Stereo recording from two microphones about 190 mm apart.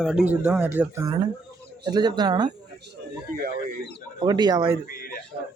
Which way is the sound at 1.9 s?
20° right (ahead or behind).